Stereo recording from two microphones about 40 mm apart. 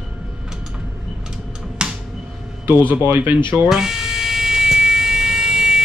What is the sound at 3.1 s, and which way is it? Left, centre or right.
Speech, right.